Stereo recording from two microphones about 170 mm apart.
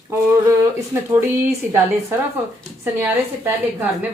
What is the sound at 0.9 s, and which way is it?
Speech, 15° right (ahead or behind).